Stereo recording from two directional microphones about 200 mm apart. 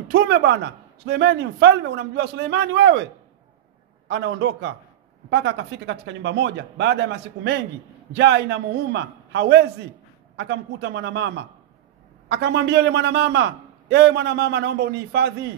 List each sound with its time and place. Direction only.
0.1 s a man's voice: 55° right (ahead or behind)
4.1 s a man's voice: 60° right (ahead or behind)